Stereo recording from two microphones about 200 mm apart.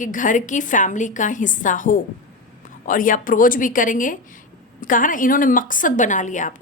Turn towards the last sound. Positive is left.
turn(degrees=40)  # may be behind; listen again after turning